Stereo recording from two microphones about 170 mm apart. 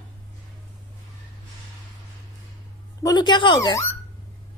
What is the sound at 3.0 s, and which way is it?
Speech, 25° left (ahead or behind).